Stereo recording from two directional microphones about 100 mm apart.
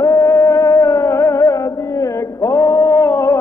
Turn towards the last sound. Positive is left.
turn(degrees=30)  # may be behind; listen again after turning